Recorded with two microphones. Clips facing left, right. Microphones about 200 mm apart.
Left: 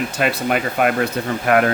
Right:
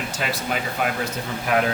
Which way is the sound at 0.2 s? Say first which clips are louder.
Left 7 dB; 60° left (ahead or behind).